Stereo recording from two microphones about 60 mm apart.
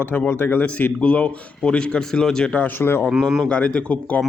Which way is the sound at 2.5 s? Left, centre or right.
Left.